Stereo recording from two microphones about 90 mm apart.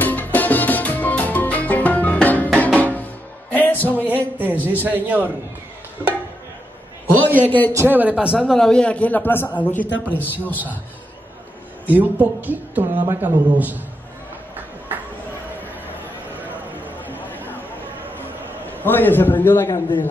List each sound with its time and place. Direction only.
0.0 s music: 20° left (ahead or behind)
4.4 s a sound: 20° right (ahead or behind)
4.8 s speech: 20° right (ahead or behind)
7.1 s a man's voice: 20° right (ahead or behind)
7.4 s a man's voice: 20° left (ahead or behind)
7.7 s speech: 25° right (ahead or behind)
8.4 s a man's voice: 5° left (ahead or behind)
11.8 s speech: 20° right (ahead or behind)
16.3 s a sound: 20° right (ahead or behind)
18.8 s a man's voice: 20° left (ahead or behind)